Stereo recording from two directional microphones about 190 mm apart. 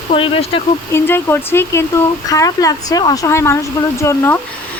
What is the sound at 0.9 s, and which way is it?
Speech, 10° left (ahead or behind).